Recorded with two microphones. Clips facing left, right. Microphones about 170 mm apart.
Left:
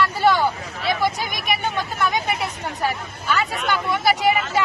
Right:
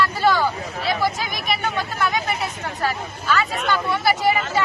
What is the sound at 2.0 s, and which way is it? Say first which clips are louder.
Vehicle: left 1 dB; 15° left (ahead or behind).